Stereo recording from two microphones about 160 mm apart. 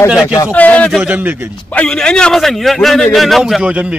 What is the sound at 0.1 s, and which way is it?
Speech, 5° right (ahead or behind).